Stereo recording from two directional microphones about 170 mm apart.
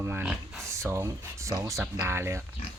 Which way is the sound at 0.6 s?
15° right (ahead or behind).